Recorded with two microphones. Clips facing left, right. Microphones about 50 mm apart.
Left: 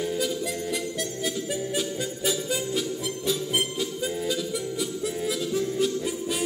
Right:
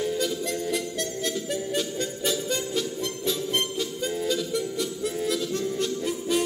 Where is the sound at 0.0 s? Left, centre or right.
Centre.